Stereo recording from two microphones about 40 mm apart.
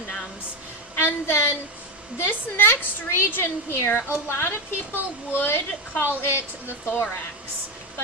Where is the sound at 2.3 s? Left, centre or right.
Left.